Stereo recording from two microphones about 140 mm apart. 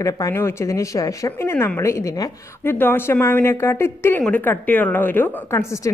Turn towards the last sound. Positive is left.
turn(degrees=20)  # may be behind; listen again after turning